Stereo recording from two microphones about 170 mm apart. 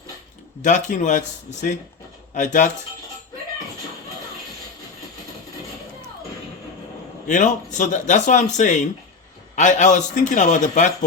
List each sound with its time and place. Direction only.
0.6 s speech: 45° left (ahead or behind)
7.3 s speech: 45° left (ahead or behind)